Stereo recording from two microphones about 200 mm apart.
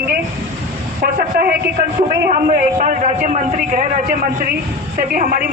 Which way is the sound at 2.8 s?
35° right (ahead or behind).